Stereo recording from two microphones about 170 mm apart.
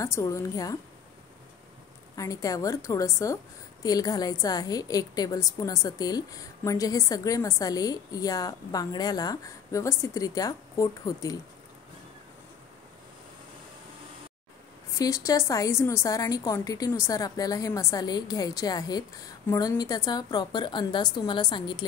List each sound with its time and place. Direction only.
0.0 s a woman's voice: 15° left (ahead or behind)
2.1 s a woman's voice: 20° left (ahead or behind)
15.0 s a woman's voice: 20° left (ahead or behind)